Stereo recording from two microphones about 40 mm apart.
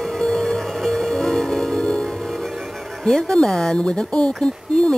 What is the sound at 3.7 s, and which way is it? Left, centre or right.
Speech, centre.